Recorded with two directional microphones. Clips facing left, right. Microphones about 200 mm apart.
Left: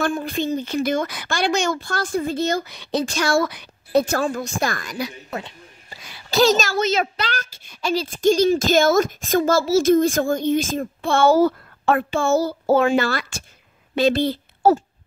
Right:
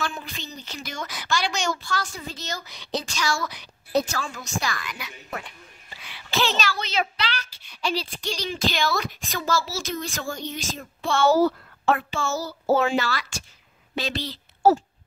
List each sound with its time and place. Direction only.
0.0 s a child's voice: 50° left (ahead or behind)